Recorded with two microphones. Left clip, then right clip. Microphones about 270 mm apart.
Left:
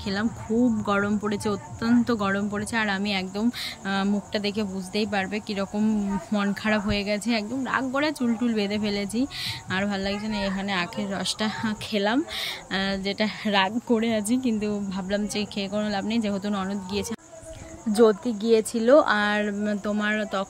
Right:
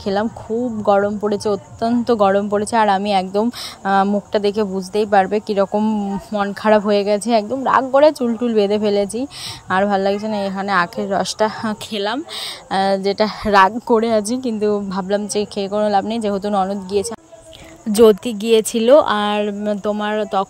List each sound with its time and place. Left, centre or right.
0.0 s speech: centre
13.7 s speech: right
14.3 s speech: centre
17.9 s speech: right